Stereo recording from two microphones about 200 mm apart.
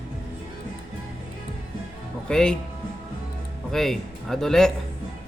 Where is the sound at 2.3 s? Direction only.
5° left (ahead or behind).